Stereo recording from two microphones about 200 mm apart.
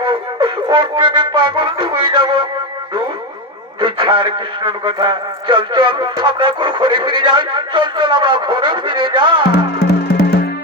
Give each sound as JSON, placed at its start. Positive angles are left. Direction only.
{"t": 0.0, "sound": "music", "side_deg": -25}
{"t": 3.8, "sound": "a man's voice", "side_deg": -25}
{"t": 9.7, "sound": "music", "side_deg": 55}